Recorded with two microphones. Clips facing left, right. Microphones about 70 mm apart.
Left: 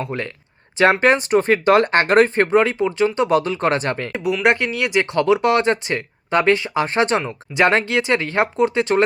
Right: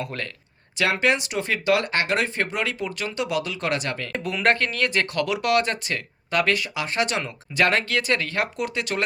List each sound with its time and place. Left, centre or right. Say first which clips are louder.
0.0 s speech: left 5 dB; left
0.8 s speech: left 7 dB; left
3.2 s speech: left 8 dB; left
4.1 s speech: left 4 dB; centre
5.1 s speech: left 8 dB; left